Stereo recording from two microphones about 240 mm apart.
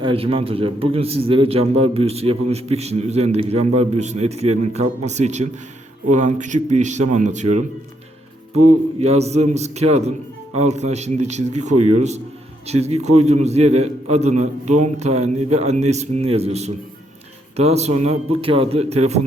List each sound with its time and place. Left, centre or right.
0.0 s a man's voice: right
9.0 s a man's voice: right